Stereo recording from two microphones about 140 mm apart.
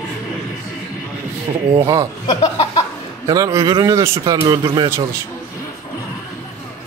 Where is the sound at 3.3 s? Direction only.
25° right (ahead or behind).